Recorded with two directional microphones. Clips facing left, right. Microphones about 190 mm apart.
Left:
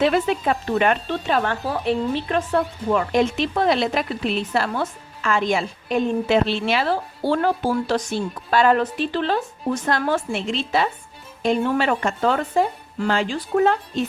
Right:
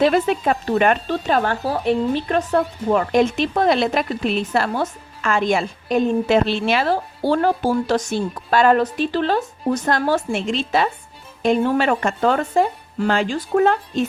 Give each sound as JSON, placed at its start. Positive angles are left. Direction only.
{"t": 0.0, "sound": "a woman's voice", "side_deg": -45}